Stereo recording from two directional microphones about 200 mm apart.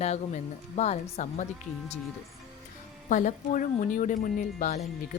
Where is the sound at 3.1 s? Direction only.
40° left (ahead or behind).